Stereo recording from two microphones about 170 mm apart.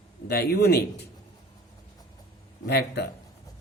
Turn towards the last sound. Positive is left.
turn(degrees=70)  # may be behind; listen again after turning